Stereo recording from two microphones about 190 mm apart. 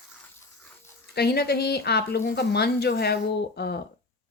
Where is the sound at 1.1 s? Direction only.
55° left (ahead or behind).